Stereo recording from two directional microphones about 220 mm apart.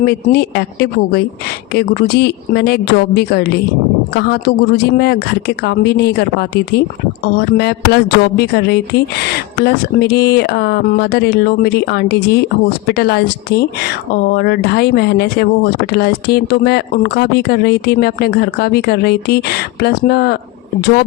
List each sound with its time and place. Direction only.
0.0 s speech: 45° left (ahead or behind)